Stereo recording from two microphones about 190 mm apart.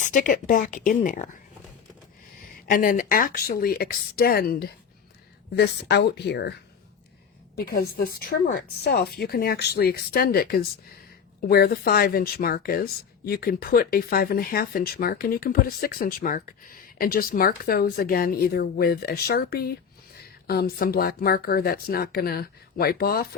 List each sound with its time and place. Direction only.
0.0 s speech: 45° left (ahead or behind)
2.6 s speech: 45° left (ahead or behind)
7.5 s speech: 55° left (ahead or behind)